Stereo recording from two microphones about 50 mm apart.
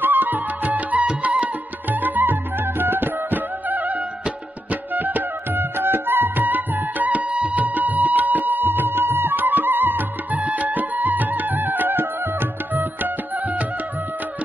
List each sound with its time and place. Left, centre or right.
0.0 s music: right